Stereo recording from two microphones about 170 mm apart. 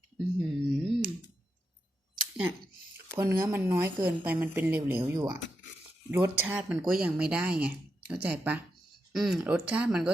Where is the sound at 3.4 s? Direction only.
10° right (ahead or behind).